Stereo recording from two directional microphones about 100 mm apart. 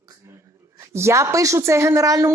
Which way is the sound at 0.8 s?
25° right (ahead or behind).